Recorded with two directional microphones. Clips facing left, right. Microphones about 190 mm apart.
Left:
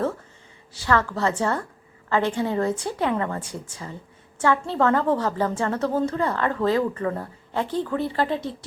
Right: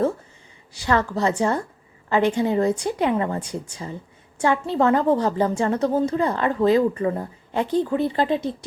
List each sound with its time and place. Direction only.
0.7 s a woman's voice: 15° right (ahead or behind)